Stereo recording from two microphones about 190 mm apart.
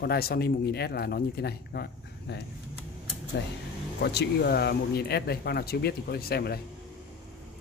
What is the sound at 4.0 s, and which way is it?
Speech, 60° left (ahead or behind).